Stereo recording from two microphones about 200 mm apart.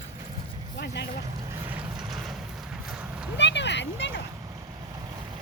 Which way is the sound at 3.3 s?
60° left (ahead or behind).